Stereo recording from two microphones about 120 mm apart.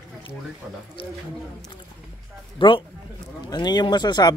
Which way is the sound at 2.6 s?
45° left (ahead or behind).